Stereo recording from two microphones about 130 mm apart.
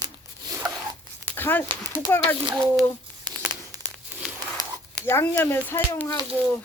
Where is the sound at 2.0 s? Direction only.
15° left (ahead or behind).